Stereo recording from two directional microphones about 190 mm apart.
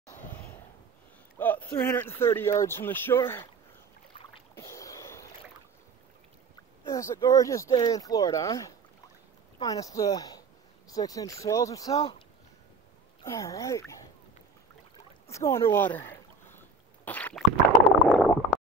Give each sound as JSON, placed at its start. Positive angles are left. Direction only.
{"t": 0.3, "sound": "a sound", "side_deg": 15}
{"t": 1.4, "sound": "speech", "side_deg": 10}
{"t": 4.6, "sound": "a sound", "side_deg": 15}
{"t": 6.9, "sound": "speech", "side_deg": 15}
{"t": 11.9, "sound": "speech", "side_deg": 35}
{"t": 13.2, "sound": "speech", "side_deg": 15}
{"t": 15.2, "sound": "speech", "side_deg": 15}
{"t": 15.7, "sound": "a sound", "side_deg": 10}
{"t": 18.1, "sound": "stomach rumble", "side_deg": 5}